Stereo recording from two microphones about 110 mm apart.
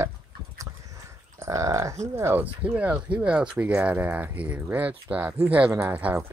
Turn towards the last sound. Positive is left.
turn(degrees=-15)  # may be behind; listen again after turning